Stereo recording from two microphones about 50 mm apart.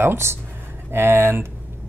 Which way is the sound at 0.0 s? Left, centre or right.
Right.